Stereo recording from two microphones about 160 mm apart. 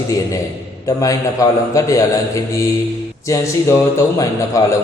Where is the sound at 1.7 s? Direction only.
20° left (ahead or behind).